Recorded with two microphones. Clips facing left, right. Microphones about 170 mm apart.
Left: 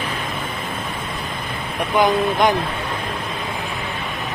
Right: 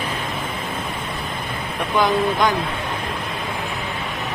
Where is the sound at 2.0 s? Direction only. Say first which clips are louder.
Left 2 dB; 20° left (ahead or behind).